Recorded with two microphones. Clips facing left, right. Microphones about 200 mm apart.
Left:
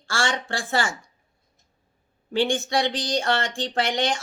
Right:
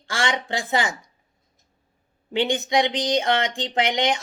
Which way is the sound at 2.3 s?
20° right (ahead or behind).